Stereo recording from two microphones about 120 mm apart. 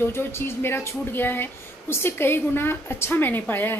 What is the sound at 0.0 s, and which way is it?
A woman's voice, 20° left (ahead or behind).